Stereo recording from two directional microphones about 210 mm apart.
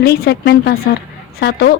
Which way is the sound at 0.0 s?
50° left (ahead or behind).